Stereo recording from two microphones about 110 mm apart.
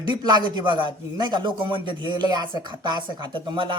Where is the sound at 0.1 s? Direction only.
45° right (ahead or behind).